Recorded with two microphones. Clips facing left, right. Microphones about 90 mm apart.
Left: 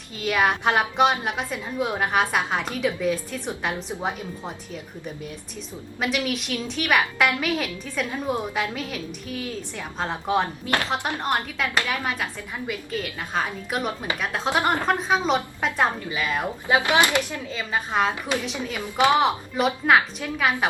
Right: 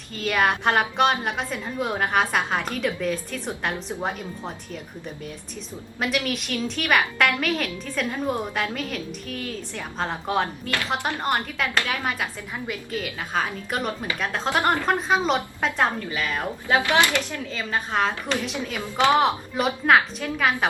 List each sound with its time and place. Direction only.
0.2 s a woman's voice: centre (ahead or behind)
6.2 s a woman's voice: centre (ahead or behind)
11.7 s speech: 15° left (ahead or behind)
12.0 s a woman's voice: centre (ahead or behind)
14.5 s speech: 15° left (ahead or behind)
14.8 s a woman's voice: centre (ahead or behind); by 19.2 s 15° left (ahead or behind)
19.2 s a woman's voice: centre (ahead or behind)